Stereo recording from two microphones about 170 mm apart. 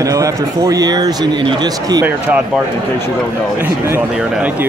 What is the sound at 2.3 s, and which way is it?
Speech, 10° right (ahead or behind).